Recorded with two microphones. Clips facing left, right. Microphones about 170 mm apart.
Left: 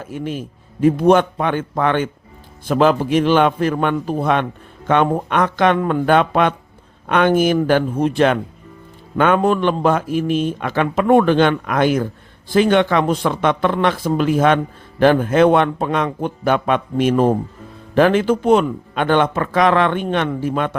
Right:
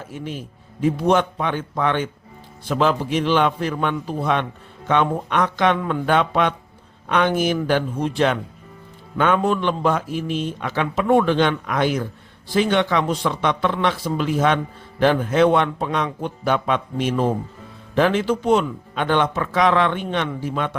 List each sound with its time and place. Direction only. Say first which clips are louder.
0.1 s a man's voice: left 7 dB; 55° left (ahead or behind)